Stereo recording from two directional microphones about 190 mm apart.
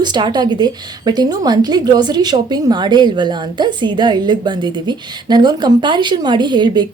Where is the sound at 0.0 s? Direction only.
25° right (ahead or behind).